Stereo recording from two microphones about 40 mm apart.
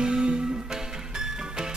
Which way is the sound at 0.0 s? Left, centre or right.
Right.